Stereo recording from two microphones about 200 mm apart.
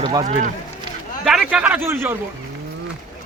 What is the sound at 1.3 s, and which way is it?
Speech, 5° right (ahead or behind).